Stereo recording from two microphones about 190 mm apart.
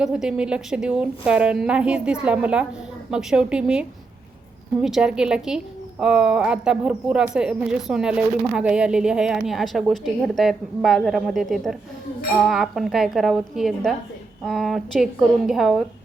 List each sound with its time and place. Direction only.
0.0 s a woman's voice: 5° right (ahead or behind)